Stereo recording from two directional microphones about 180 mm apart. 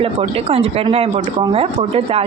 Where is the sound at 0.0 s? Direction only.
30° right (ahead or behind).